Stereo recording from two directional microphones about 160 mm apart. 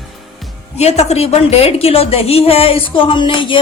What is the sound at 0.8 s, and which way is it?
A woman's voice, 40° left (ahead or behind).